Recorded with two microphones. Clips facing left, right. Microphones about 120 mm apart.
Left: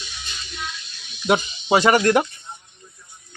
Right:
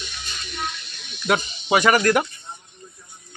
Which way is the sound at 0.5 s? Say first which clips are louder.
Right 4 dB; 60° right (ahead or behind).